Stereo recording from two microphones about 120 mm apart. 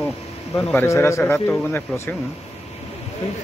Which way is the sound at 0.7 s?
20° left (ahead or behind).